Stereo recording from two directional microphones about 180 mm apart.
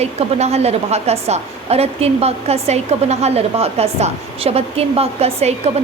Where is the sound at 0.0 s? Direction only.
35° right (ahead or behind).